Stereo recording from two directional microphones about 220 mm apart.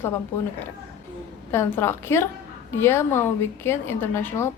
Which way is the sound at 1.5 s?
10° left (ahead or behind).